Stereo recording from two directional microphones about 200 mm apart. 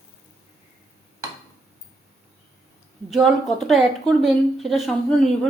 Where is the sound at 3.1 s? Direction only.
Centre (ahead or behind).